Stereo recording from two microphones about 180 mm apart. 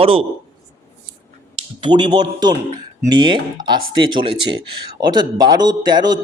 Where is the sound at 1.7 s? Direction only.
25° right (ahead or behind).